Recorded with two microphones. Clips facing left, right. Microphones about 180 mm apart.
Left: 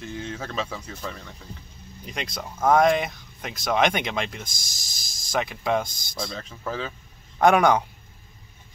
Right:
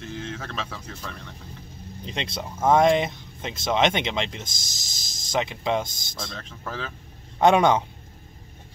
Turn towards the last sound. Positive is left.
turn(degrees=-25)  # may be behind; listen again after turning